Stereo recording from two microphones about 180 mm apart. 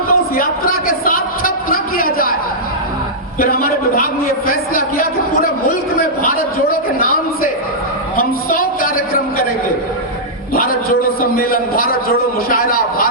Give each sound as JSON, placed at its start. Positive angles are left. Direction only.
{"t": 0.1, "sound": "a man's voice", "side_deg": 55}
{"t": 3.4, "sound": "a man's voice", "side_deg": 55}
{"t": 8.1, "sound": "a sound", "side_deg": 50}
{"t": 10.5, "sound": "a man's voice", "side_deg": 55}